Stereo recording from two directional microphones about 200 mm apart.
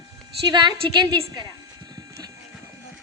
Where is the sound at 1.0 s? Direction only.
20° right (ahead or behind).